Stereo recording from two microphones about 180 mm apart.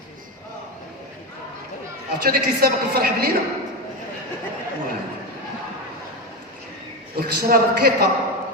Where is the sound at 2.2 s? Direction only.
55° right (ahead or behind).